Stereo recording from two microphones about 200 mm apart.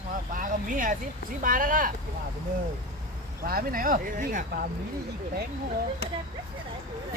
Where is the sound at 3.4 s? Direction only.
50° right (ahead or behind).